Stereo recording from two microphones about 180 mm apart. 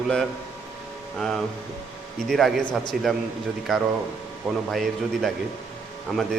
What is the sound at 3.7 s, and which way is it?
A man's voice, centre (ahead or behind).